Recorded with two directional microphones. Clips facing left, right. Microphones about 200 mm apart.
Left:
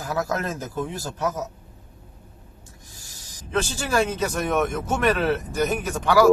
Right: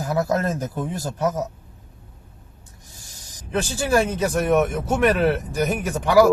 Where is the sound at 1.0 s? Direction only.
40° right (ahead or behind).